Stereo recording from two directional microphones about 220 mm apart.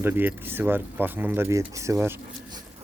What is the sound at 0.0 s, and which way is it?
Speech, 10° right (ahead or behind).